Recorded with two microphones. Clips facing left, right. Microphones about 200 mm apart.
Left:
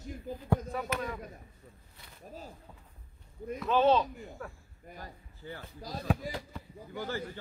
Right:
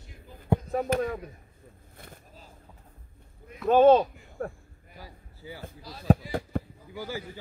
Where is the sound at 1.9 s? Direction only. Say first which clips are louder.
Right 8 dB; 50° right (ahead or behind).